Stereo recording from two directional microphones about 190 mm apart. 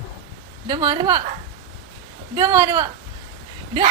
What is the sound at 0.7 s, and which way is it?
Speech, 20° right (ahead or behind).